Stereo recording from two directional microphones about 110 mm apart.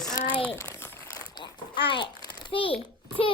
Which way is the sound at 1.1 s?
35° left (ahead or behind).